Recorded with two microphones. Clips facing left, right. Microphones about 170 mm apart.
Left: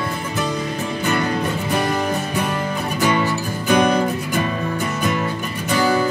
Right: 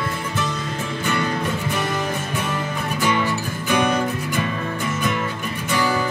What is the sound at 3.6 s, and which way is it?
Music, 35° left (ahead or behind).